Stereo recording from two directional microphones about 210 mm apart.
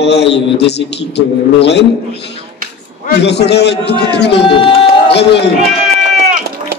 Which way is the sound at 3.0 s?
50° left (ahead or behind).